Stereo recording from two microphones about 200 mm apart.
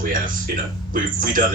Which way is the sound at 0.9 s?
45° right (ahead or behind).